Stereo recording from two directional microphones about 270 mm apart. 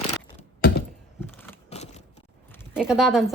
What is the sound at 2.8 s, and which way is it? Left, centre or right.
Speech, centre.